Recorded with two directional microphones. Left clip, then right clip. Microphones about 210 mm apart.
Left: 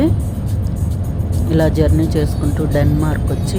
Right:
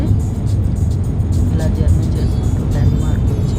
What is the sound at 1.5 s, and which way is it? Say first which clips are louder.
Speech: left 12 dB; 30° left (ahead or behind).